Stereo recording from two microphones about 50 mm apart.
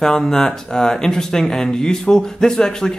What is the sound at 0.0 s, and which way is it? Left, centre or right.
Speech, centre.